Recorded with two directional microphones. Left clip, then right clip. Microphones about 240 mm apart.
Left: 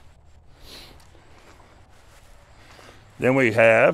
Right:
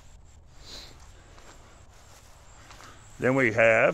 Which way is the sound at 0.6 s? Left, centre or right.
Left.